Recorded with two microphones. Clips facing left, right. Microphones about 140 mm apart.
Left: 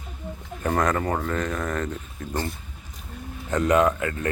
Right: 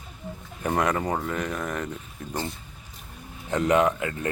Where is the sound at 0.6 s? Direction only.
20° right (ahead or behind).